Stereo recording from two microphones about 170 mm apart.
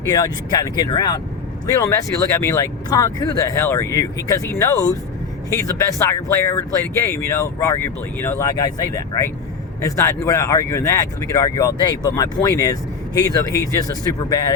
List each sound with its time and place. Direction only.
0.1 s speech: 20° left (ahead or behind)